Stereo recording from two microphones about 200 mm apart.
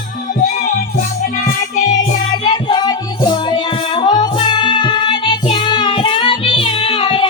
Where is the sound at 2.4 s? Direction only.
20° left (ahead or behind).